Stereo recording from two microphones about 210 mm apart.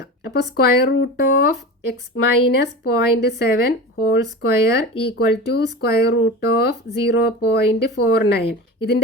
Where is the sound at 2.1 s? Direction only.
65° left (ahead or behind).